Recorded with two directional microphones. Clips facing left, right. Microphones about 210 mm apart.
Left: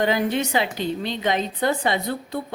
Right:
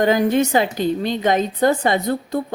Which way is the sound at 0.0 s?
45° right (ahead or behind).